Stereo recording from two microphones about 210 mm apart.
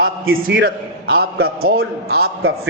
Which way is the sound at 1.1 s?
50° right (ahead or behind).